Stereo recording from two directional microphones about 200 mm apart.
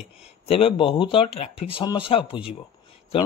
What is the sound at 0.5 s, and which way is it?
A man's voice, 30° left (ahead or behind).